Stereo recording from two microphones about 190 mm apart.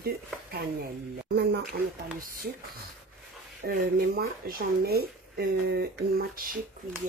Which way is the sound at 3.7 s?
50° right (ahead or behind).